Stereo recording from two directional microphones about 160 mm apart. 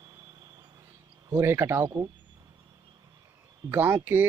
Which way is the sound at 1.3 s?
15° right (ahead or behind).